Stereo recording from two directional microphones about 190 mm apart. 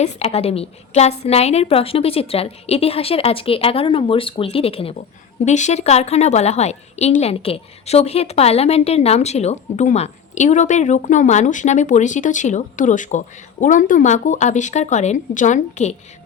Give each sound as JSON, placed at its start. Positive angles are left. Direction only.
{"t": 0.0, "sound": "a woman's voice", "side_deg": 35}